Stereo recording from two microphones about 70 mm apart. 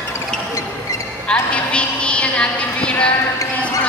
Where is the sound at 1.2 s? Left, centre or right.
Centre.